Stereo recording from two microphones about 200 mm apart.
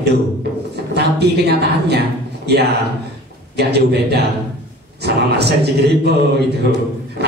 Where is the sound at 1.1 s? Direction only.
55° right (ahead or behind).